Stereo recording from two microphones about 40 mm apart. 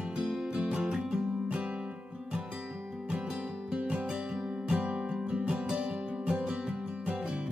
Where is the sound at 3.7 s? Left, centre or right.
Right.